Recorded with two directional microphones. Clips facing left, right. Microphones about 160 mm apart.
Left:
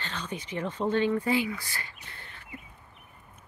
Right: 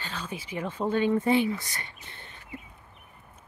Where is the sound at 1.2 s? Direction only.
20° right (ahead or behind).